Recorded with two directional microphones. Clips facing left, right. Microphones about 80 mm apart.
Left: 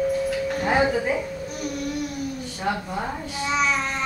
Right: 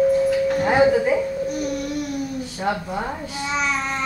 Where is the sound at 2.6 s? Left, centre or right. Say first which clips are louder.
Right 2 dB; centre.